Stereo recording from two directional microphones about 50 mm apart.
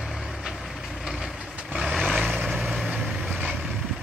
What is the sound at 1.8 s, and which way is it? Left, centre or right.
Vehicle, centre.